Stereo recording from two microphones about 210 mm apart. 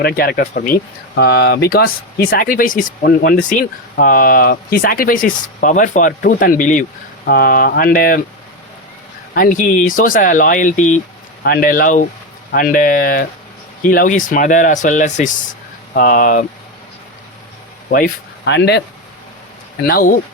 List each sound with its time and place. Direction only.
0.0 s speech: 45° left (ahead or behind)
9.3 s speech: 40° left (ahead or behind)
17.9 s speech: 50° left (ahead or behind)
19.9 s speech: 40° left (ahead or behind)